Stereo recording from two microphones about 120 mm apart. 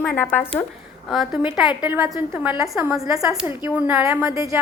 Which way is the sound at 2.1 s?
20° right (ahead or behind).